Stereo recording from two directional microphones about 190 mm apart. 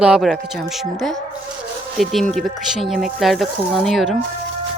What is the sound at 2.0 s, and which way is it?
Speech, centre (ahead or behind).